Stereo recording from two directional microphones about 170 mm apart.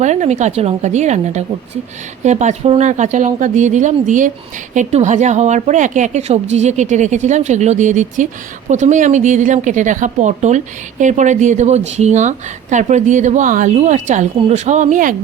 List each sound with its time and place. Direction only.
0.0 s speech: 45° right (ahead or behind)